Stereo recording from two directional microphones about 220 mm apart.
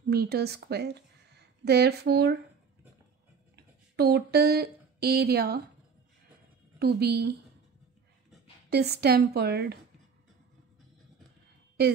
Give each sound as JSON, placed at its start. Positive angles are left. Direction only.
{"t": 0.1, "sound": "a woman's voice", "side_deg": -45}
{"t": 3.5, "sound": "speech", "side_deg": -45}
{"t": 6.8, "sound": "a woman's voice", "side_deg": -50}
{"t": 8.6, "sound": "a woman's voice", "side_deg": -45}